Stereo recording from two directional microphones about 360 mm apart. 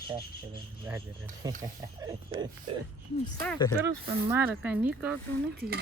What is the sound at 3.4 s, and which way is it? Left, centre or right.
Speech, centre.